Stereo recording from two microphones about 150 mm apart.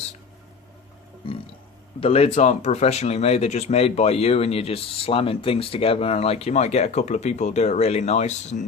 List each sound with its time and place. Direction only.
1.2 s burping: 35° left (ahead or behind)
2.0 s speech: 40° left (ahead or behind)